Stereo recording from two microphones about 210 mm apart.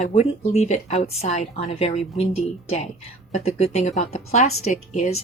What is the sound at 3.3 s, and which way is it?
Speech, 30° left (ahead or behind).